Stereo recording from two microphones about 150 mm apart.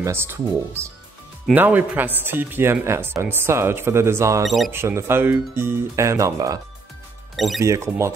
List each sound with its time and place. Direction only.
0.0 s a man's voice: 15° right (ahead or behind)
7.3 s speech: centre (ahead or behind)
7.6 s speech: 20° right (ahead or behind)